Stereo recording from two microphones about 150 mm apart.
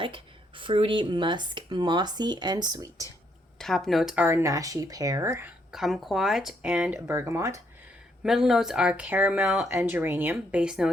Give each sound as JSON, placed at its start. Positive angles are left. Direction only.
{"t": 0.0, "sound": "speech", "side_deg": -35}
{"t": 3.6, "sound": "speech", "side_deg": 0}
{"t": 5.7, "sound": "speech", "side_deg": 0}
{"t": 8.2, "sound": "speech", "side_deg": -5}
{"t": 9.6, "sound": "speech", "side_deg": -15}